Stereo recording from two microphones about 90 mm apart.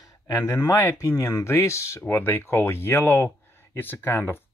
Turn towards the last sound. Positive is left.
turn(degrees=25)  # may be behind; listen again after turning